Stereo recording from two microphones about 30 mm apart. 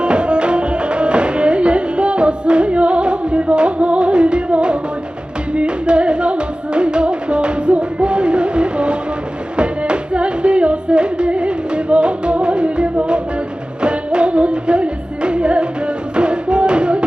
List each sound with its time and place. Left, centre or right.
0.0 s music: right